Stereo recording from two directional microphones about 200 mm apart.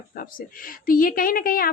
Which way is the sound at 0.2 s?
45° left (ahead or behind).